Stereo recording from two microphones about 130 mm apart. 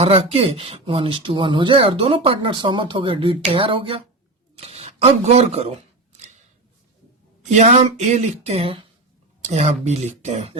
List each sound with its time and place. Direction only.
0.0 s speech: 50° right (ahead or behind)
7.5 s speech: 60° right (ahead or behind)